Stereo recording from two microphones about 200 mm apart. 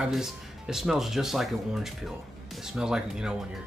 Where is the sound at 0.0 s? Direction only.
Centre (ahead or behind).